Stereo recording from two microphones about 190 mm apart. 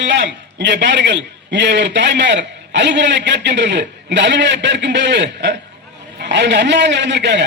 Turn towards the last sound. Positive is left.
turn(degrees=-65)  # may be behind; listen again after turning